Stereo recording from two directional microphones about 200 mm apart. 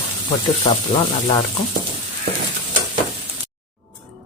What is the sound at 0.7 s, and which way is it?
Speech, 25° left (ahead or behind).